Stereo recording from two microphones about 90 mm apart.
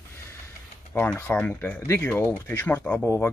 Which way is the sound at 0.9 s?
20° left (ahead or behind).